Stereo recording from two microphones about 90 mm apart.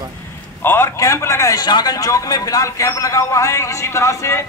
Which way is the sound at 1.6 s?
50° left (ahead or behind).